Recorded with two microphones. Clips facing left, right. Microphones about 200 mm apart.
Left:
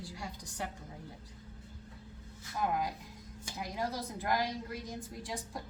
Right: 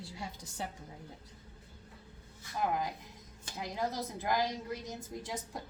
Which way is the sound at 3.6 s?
20° right (ahead or behind).